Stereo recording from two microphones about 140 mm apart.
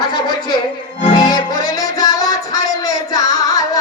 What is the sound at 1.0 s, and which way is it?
Music, 35° left (ahead or behind).